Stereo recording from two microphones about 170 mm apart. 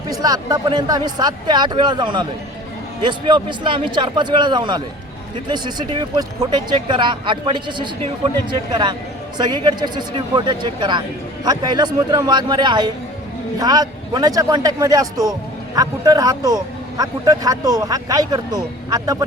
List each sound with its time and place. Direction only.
0.1 s speech: 20° right (ahead or behind)